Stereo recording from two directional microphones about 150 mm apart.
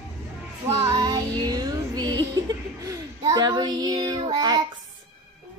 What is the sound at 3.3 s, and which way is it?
Child singing, 25° right (ahead or behind).